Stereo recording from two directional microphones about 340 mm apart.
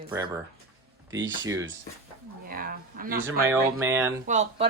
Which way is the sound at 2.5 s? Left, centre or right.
Right.